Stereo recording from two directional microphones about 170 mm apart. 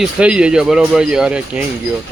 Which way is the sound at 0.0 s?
5° right (ahead or behind).